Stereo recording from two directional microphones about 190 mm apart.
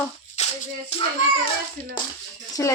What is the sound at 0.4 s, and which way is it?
Music, 35° left (ahead or behind).